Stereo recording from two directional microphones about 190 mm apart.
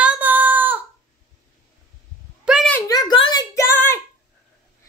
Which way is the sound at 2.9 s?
20° left (ahead or behind).